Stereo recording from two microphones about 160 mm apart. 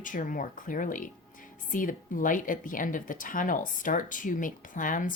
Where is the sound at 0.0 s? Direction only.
55° left (ahead or behind).